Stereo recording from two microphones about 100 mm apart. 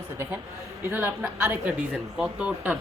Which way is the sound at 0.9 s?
20° right (ahead or behind).